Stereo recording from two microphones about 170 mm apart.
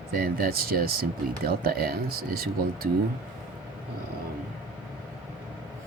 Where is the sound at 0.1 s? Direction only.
60° right (ahead or behind).